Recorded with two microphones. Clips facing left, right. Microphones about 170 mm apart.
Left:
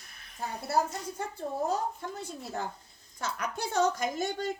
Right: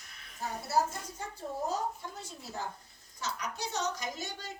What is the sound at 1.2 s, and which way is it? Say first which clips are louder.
Speech: left 5 dB; 60° left (ahead or behind).